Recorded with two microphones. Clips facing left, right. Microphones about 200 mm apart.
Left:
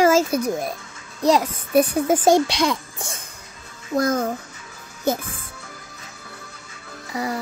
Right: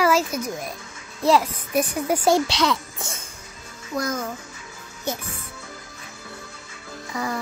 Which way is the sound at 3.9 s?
55° left (ahead or behind).